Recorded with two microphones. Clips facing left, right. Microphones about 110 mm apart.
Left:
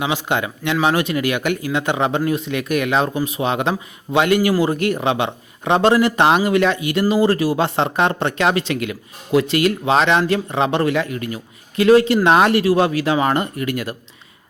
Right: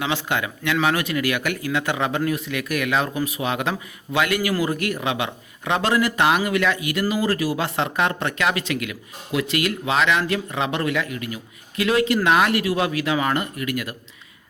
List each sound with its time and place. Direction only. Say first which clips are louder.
0.0 s a man's voice: left 3 dB; 20° left (ahead or behind)